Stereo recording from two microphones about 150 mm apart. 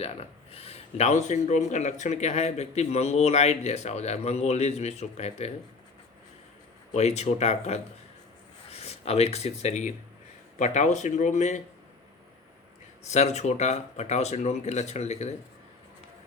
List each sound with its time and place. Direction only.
0.0 s a man's voice: 40° left (ahead or behind)
6.9 s a man's voice: 45° left (ahead or behind)
13.1 s a man's voice: 50° left (ahead or behind)